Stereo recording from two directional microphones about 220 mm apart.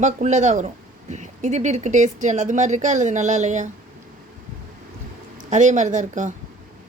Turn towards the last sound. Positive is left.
turn(degrees=-35)  # may be behind; listen again after turning